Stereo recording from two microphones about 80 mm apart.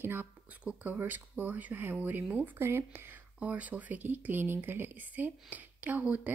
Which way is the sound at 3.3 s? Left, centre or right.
Centre.